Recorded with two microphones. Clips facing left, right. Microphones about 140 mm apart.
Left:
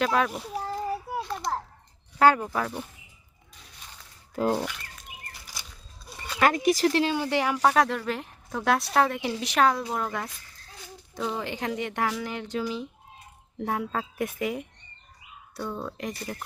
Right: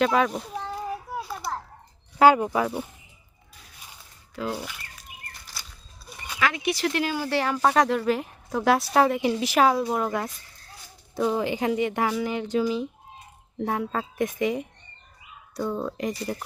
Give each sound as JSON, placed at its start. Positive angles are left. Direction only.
{"t": 0.0, "sound": "speech", "side_deg": 0}
{"t": 1.1, "sound": "children playing", "side_deg": -5}
{"t": 2.1, "sound": "speech", "side_deg": -15}
{"t": 4.4, "sound": "speech", "side_deg": 45}
{"t": 4.6, "sound": "a sound", "side_deg": -5}
{"t": 6.1, "sound": "a sound", "side_deg": -15}
{"t": 6.4, "sound": "speech", "side_deg": 45}
{"t": 7.7, "sound": "speech", "side_deg": -5}
{"t": 15.7, "sound": "speech", "side_deg": -10}